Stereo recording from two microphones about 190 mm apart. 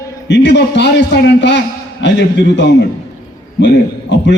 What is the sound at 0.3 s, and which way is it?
A man's voice, 65° left (ahead or behind).